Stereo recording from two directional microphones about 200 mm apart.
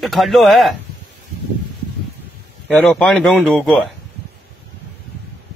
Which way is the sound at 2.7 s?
5° left (ahead or behind).